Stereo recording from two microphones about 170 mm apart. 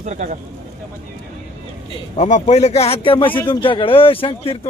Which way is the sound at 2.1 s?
40° left (ahead or behind).